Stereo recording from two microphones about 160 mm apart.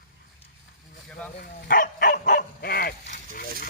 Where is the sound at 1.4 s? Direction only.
65° left (ahead or behind).